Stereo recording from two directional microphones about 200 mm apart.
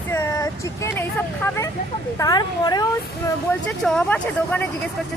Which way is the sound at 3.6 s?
5° left (ahead or behind).